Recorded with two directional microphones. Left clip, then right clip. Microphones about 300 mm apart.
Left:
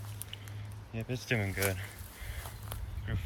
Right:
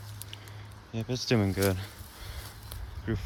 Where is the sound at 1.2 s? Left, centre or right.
Right.